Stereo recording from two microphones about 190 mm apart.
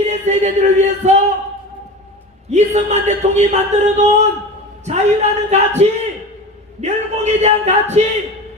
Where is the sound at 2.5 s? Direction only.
35° right (ahead or behind).